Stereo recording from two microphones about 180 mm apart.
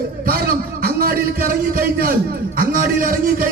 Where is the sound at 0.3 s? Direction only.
55° right (ahead or behind).